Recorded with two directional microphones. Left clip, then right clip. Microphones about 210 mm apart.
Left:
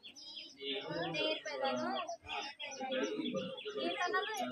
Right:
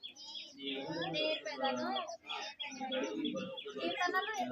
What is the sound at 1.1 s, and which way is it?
Bird, 15° left (ahead or behind).